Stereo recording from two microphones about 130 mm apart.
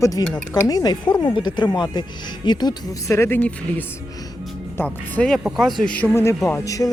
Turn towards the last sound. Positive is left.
turn(degrees=25)  # may be behind; listen again after turning